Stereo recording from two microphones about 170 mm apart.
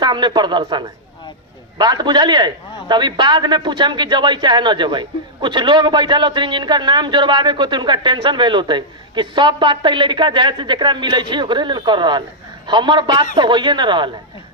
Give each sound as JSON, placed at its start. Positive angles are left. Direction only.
{"t": 0.0, "sound": "a man's voice", "side_deg": -25}